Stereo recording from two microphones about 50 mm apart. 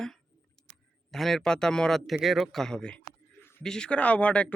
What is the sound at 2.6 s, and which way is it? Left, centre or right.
Speech, centre.